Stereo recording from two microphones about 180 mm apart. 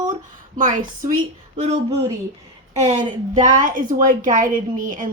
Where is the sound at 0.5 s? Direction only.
45° right (ahead or behind).